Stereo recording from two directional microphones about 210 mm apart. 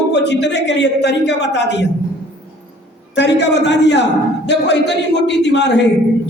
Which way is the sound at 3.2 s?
55° left (ahead or behind).